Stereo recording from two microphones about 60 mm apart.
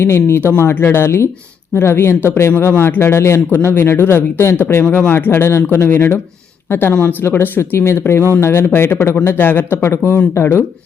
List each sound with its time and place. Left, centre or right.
0.0 s speech: left
4.6 s speech: left
6.8 s speech: left
7.5 s speech: left